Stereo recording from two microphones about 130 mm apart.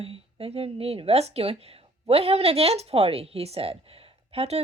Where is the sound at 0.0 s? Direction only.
50° right (ahead or behind).